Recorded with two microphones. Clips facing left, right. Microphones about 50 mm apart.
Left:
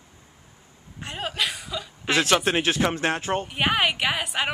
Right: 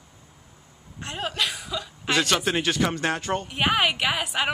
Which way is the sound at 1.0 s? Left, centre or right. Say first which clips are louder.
Even; centre.